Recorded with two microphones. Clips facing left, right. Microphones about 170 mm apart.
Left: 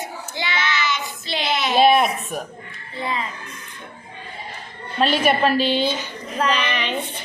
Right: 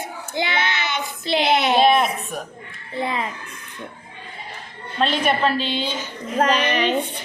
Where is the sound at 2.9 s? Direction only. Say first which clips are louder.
Right 2 dB; 55° right (ahead or behind).